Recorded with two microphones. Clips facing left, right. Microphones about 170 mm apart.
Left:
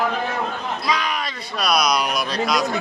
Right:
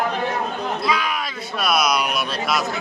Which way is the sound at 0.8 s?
5° right (ahead or behind).